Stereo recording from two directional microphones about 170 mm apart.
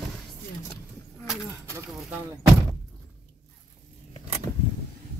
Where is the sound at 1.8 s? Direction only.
10° right (ahead or behind).